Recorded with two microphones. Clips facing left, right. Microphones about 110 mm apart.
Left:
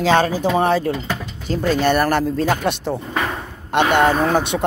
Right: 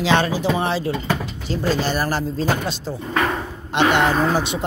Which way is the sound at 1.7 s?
60° left (ahead or behind).